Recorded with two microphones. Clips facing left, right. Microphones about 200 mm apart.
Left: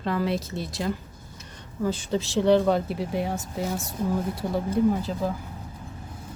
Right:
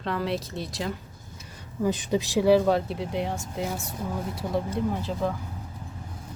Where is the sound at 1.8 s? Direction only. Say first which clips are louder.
Right 1 dB; 15° right (ahead or behind); by 5.3 s centre (ahead or behind).